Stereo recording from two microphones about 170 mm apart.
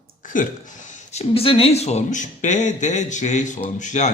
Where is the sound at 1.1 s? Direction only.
35° left (ahead or behind).